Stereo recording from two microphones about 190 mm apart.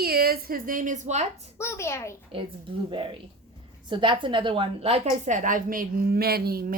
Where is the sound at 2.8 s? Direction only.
25° right (ahead or behind).